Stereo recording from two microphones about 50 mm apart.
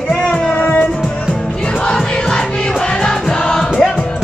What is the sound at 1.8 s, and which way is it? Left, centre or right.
Music, centre.